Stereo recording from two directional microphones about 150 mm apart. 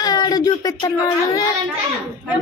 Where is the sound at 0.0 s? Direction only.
25° left (ahead or behind).